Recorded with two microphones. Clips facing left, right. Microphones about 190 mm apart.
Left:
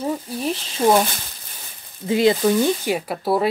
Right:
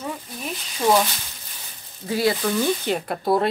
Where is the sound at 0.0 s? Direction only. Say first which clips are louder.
Left 8 dB; 30° left (ahead or behind).